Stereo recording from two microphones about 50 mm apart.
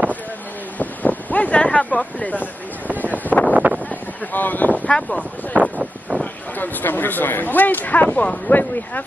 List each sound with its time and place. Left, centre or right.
0.7 s wind noise: left
2.3 s speech: right
3.3 s a sound: left
3.5 s a sound: right
3.9 s speech: left
4.9 s speech: left
6.6 s speech: left